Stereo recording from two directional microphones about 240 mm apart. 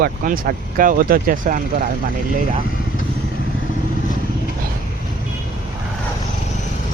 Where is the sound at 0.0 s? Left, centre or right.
Right.